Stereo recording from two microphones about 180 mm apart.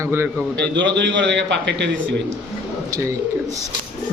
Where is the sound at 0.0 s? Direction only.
15° right (ahead or behind).